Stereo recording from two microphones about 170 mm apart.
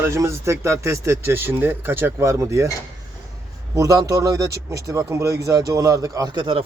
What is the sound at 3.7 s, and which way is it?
A man's voice, 20° right (ahead or behind).